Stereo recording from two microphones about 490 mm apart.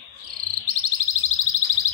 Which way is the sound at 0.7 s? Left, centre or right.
Right.